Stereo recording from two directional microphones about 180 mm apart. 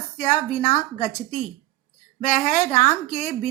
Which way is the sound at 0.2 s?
45° left (ahead or behind).